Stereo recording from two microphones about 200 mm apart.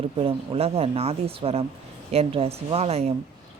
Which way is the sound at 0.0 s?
30° right (ahead or behind).